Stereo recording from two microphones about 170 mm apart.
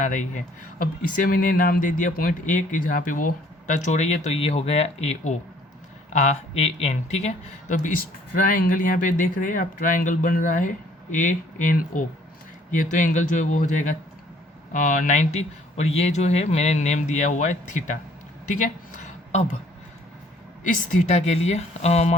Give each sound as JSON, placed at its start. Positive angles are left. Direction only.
{"t": 0.0, "sound": "speech", "side_deg": 50}
{"t": 18.4, "sound": "a sound", "side_deg": 45}
{"t": 20.9, "sound": "speech", "side_deg": 45}